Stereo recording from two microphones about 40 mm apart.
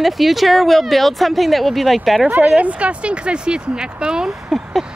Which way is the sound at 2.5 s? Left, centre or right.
Right.